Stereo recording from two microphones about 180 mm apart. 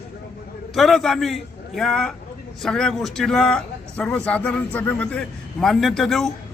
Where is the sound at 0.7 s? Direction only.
Centre (ahead or behind).